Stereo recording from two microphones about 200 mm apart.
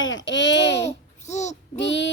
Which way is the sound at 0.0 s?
65° left (ahead or behind).